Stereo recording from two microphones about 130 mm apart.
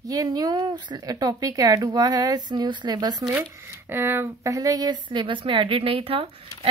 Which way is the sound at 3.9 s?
20° right (ahead or behind).